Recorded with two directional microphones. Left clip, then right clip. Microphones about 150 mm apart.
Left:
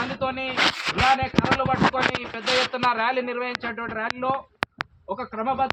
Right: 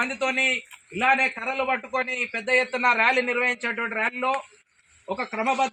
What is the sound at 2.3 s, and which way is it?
A man's voice, 20° right (ahead or behind).